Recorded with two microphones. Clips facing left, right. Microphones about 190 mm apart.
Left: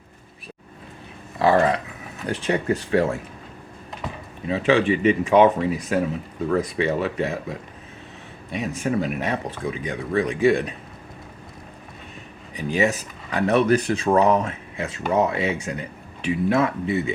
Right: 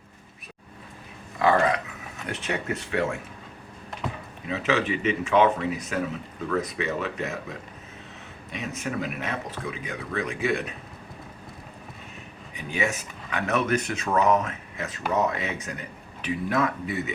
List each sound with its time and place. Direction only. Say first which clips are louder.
1.4 s speech: left 3 dB; 35° left (ahead or behind)
4.4 s speech: left 6 dB; 30° left (ahead or behind)
8.7 s speech: left 7 dB; 30° left (ahead or behind)
12.5 s speech: left 7 dB; 35° left (ahead or behind)